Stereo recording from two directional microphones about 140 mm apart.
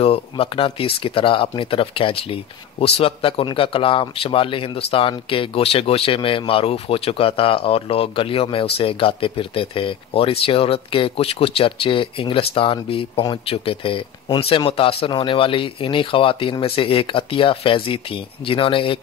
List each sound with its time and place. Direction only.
0.0 s speech: 45° left (ahead or behind)